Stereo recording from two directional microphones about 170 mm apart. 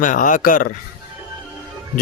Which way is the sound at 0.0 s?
50° left (ahead or behind).